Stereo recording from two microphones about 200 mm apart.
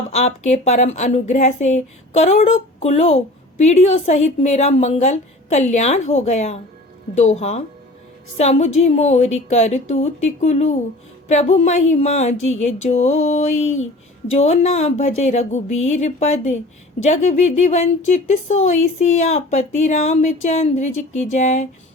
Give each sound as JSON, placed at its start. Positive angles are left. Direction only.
{"t": 0.1, "sound": "speech", "side_deg": 30}